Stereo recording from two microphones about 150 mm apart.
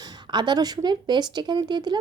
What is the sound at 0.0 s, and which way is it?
A woman's voice, 30° right (ahead or behind).